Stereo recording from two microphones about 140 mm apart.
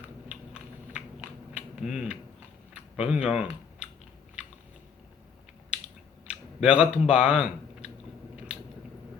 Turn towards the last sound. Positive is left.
turn(degrees=-5)  # may be behind; listen again after turning